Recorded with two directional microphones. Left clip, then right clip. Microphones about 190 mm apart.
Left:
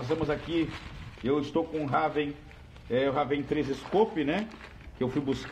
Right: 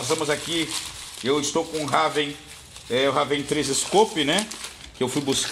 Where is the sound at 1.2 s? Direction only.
40° right (ahead or behind).